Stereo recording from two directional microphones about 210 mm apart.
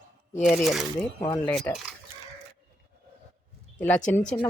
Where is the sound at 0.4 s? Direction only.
Centre (ahead or behind).